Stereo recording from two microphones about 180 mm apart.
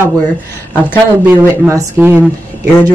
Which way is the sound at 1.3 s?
15° right (ahead or behind).